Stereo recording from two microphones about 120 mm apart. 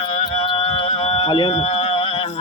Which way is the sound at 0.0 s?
75° left (ahead or behind).